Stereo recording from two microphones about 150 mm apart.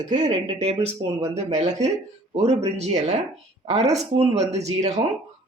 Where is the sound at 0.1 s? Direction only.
50° right (ahead or behind).